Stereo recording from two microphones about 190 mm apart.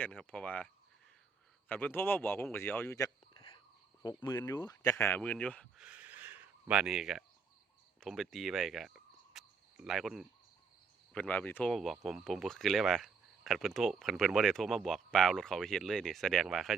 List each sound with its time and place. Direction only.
0.0 s speech: 5° left (ahead or behind)
5.8 s a sound: 5° right (ahead or behind)
8.0 s speech: centre (ahead or behind)